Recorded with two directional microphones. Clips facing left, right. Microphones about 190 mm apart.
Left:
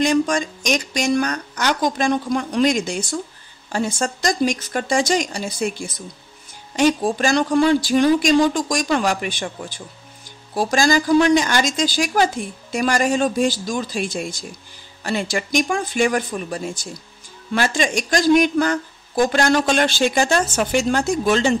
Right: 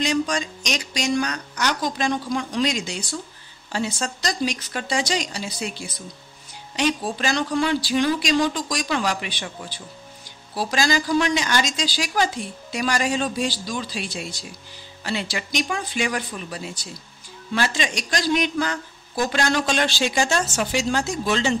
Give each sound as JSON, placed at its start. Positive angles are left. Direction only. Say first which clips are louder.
{"t": 0.0, "sound": "speech", "louder": "left 5 dB", "side_deg": 50}